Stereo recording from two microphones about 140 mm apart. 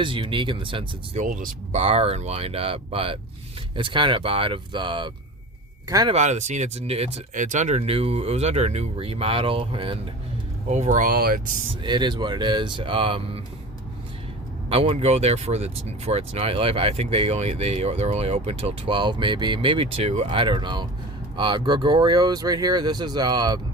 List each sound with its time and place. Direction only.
0.0 s speech: 35° right (ahead or behind)
1.1 s speech: 70° right (ahead or behind)
1.8 s speech: 45° right (ahead or behind)
6.1 s speech: 55° right (ahead or behind)
7.3 s speech: 65° right (ahead or behind); by 10.0 s 40° right (ahead or behind)
10.7 s speech: 60° right (ahead or behind); by 11.3 s 90° right
11.8 s speech: 35° right (ahead or behind)
14.7 s speech: 45° right (ahead or behind)